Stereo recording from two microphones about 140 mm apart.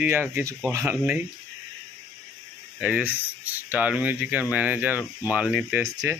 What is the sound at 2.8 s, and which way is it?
Speech, 10° right (ahead or behind).